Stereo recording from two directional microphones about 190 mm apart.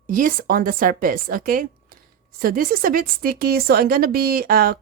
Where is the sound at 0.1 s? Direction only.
45° right (ahead or behind).